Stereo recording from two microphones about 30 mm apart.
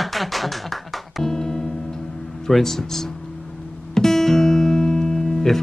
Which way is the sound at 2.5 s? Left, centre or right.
Centre.